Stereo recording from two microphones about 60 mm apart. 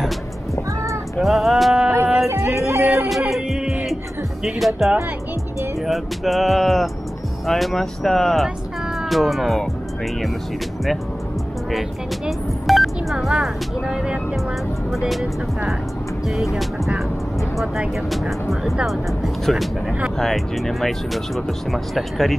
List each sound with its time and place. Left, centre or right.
1.2 s music: centre
2.2 s music: right
3.1 s music: centre
4.6 s speech: centre
12.3 s music: centre
13.3 s speech: centre
14.9 s speech: centre
17.6 s speech: centre